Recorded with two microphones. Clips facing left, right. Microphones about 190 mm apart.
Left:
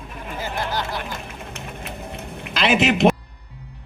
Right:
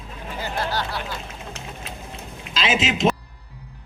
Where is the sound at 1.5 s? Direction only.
60° left (ahead or behind).